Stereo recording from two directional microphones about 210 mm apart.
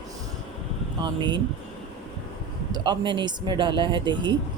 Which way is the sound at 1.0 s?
20° right (ahead or behind).